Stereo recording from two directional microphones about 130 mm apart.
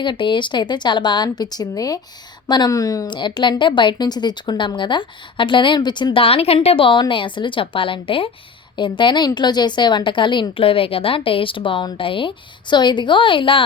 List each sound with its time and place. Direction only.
0.0 s a woman's voice: 40° left (ahead or behind)